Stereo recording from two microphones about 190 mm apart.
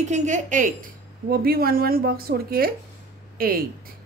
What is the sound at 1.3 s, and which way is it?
Speech, 50° right (ahead or behind).